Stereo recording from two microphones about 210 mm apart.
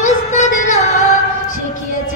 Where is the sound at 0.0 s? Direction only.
35° left (ahead or behind).